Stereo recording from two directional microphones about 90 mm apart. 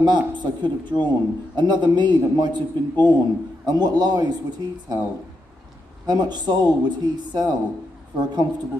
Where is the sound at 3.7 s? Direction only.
50° right (ahead or behind).